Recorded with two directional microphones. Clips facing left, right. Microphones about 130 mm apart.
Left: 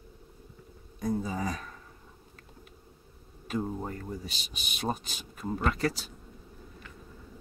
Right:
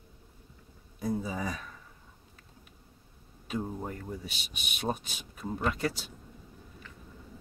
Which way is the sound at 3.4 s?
Centre (ahead or behind).